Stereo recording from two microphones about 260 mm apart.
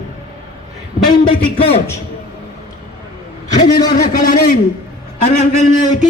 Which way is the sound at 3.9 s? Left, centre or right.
Left.